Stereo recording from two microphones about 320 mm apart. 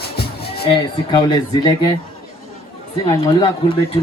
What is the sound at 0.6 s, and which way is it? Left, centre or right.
Speech, centre.